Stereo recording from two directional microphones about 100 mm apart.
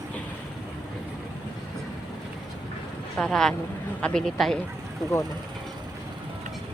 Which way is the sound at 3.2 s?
5° left (ahead or behind).